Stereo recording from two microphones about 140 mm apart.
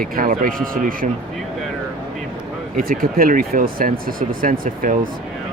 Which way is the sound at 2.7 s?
85° right.